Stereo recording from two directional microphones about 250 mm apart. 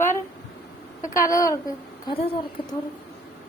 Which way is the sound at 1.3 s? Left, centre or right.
Centre.